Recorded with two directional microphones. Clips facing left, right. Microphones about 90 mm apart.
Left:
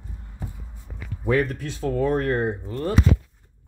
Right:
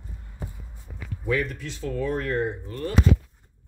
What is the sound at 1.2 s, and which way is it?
Speech, 45° left (ahead or behind).